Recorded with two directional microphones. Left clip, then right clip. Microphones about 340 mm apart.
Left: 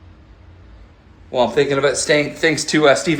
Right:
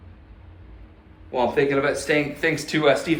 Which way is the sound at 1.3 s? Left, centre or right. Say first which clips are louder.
Left 5 dB; centre.